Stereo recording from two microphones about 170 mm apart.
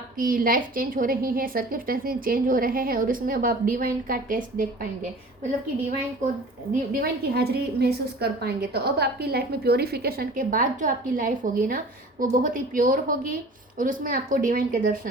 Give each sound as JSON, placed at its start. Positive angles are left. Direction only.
{"t": 0.2, "sound": "a woman's voice", "side_deg": -55}
{"t": 7.0, "sound": "a woman's voice", "side_deg": -70}